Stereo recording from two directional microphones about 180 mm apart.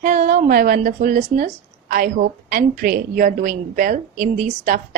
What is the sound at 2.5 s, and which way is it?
A woman's voice, 50° right (ahead or behind).